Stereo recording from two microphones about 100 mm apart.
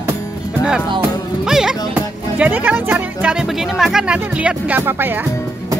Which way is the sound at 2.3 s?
15° right (ahead or behind).